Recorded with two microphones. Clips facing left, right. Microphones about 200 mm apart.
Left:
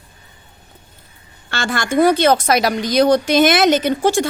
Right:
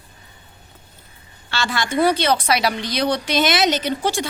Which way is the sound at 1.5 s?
50° left (ahead or behind).